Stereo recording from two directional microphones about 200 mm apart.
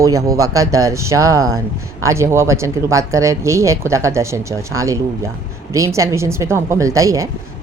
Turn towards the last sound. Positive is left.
turn(degrees=-15)  # may be behind; listen again after turning